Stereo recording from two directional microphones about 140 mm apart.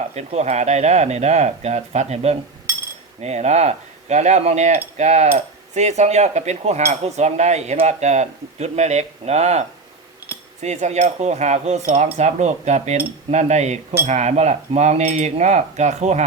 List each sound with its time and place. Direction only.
0.1 s cutlery: 50° right (ahead or behind)
4.9 s mechanisms: 55° right (ahead or behind)
5.7 s cutlery: 55° right (ahead or behind)